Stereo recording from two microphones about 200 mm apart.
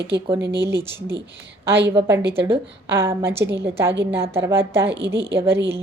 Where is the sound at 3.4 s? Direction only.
60° right (ahead or behind).